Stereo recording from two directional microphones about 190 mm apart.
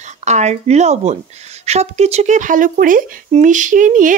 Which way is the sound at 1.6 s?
35° right (ahead or behind).